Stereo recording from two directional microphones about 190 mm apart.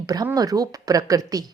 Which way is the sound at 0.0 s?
20° right (ahead or behind).